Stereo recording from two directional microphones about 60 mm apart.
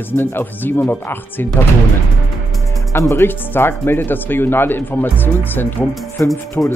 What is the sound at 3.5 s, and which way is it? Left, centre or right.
Speech, left.